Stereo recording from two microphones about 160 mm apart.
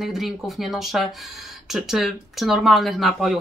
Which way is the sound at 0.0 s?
Centre (ahead or behind).